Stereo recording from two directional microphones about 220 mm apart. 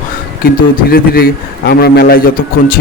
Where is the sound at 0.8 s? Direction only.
45° left (ahead or behind).